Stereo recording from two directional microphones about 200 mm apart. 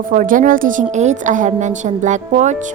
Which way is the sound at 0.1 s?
40° right (ahead or behind).